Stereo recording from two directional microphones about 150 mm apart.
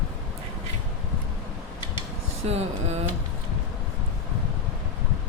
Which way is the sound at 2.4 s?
45° right (ahead or behind).